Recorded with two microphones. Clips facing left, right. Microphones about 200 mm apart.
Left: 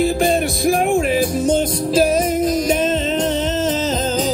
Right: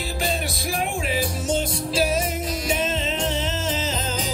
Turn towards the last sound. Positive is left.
turn(degrees=45)  # may be behind; listen again after turning